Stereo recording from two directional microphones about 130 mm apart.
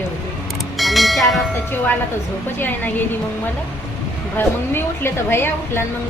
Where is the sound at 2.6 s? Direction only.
15° left (ahead or behind).